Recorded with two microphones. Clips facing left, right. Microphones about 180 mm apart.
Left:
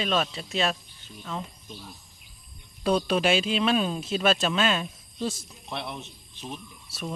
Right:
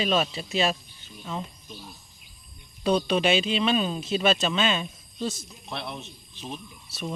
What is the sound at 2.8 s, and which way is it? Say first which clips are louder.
Speech: right 1 dB; 5° left (ahead or behind).